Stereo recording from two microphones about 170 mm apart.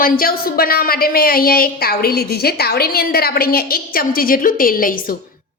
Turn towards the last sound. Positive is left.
turn(degrees=55)  # may be behind; listen again after turning